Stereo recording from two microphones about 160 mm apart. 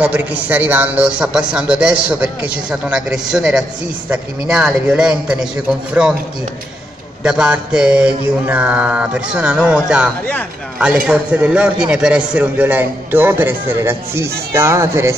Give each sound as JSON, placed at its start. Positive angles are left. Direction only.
{"t": 0.0, "sound": "a man's voice", "side_deg": -10}
{"t": 7.2, "sound": "a man's voice", "side_deg": -5}
{"t": 11.1, "sound": "a man's voice", "side_deg": -10}